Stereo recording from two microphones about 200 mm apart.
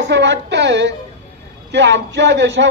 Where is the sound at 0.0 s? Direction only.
60° right (ahead or behind).